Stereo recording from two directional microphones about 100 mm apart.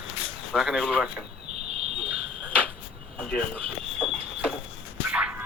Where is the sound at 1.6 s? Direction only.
90° right.